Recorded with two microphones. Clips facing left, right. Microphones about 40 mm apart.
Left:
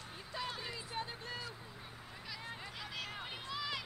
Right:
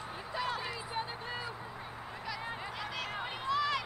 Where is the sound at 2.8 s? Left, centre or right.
Centre.